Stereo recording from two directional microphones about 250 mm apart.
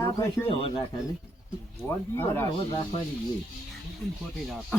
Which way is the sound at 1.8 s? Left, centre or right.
Centre.